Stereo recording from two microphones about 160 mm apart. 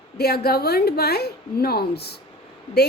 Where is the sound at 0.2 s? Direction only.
80° left.